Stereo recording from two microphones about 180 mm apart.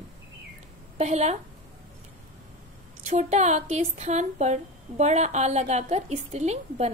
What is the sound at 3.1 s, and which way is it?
A woman's voice, 40° right (ahead or behind).